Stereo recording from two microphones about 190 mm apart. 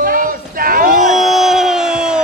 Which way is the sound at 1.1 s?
Centre (ahead or behind).